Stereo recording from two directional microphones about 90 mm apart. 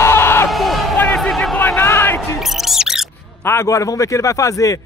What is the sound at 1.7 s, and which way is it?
Music, 25° left (ahead or behind).